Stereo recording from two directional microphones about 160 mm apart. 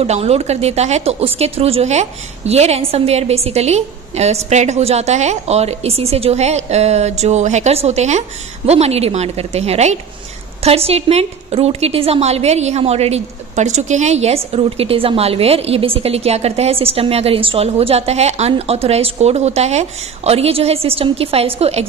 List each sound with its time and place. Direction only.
0.0 s a woman's voice: 40° right (ahead or behind)